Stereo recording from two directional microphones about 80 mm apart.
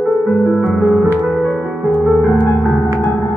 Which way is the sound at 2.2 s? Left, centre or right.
Left.